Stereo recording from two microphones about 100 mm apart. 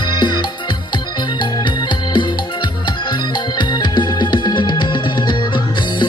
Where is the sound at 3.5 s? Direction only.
50° left (ahead or behind).